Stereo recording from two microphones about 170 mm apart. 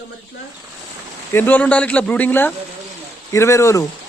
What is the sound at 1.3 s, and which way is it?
Speech, 10° left (ahead or behind).